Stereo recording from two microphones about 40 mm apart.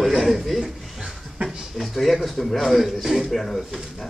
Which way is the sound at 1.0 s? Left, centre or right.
Centre.